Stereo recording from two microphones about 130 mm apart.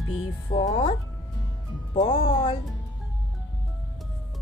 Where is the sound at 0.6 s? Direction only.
55° left (ahead or behind).